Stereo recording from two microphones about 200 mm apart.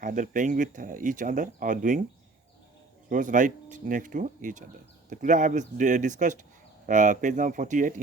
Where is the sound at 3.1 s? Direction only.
40° right (ahead or behind).